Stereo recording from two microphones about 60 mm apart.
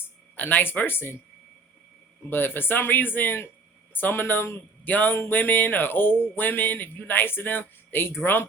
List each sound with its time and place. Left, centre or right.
0.3 s speech: left
2.3 s speech: left
4.9 s speech: left